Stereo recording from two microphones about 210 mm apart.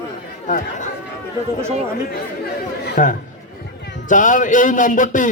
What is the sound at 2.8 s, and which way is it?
Speech, 40° left (ahead or behind).